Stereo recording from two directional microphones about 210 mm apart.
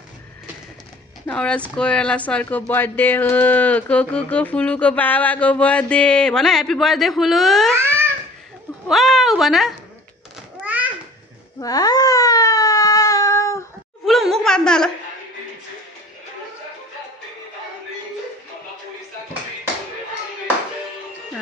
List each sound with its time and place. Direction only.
1.2 s speech: 5° left (ahead or behind)
7.7 s babbling: 10° right (ahead or behind)
8.8 s speech: centre (ahead or behind)
10.6 s a sound: 5° right (ahead or behind)
11.6 s wail: 20° left (ahead or behind)
14.0 s a sound: centre (ahead or behind)